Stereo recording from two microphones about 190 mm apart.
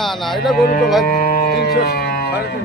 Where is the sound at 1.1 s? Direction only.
50° left (ahead or behind).